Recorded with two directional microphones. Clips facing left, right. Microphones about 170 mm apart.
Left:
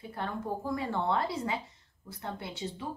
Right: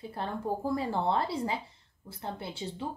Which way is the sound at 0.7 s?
30° right (ahead or behind).